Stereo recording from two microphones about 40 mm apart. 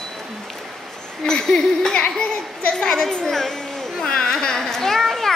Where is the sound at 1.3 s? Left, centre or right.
Centre.